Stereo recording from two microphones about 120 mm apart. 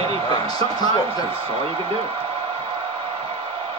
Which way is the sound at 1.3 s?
50° right (ahead or behind).